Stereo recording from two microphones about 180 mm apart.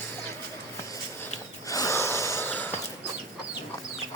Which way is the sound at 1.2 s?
20° left (ahead or behind).